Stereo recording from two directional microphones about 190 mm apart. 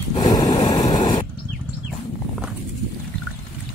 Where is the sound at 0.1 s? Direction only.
20° left (ahead or behind).